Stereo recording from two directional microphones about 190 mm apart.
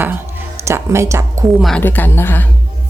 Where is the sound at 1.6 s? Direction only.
5° left (ahead or behind).